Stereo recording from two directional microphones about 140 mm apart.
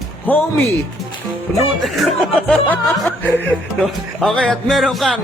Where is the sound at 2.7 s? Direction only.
10° left (ahead or behind).